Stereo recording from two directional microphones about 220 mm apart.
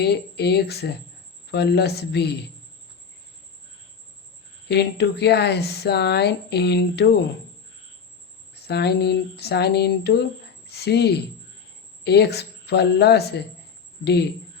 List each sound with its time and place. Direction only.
0.0 s speech: 50° left (ahead or behind)
4.7 s speech: 50° left (ahead or behind)
8.5 s speech: 50° left (ahead or behind)